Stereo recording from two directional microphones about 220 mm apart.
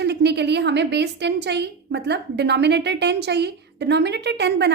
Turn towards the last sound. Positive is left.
turn(degrees=-50)  # may be behind; listen again after turning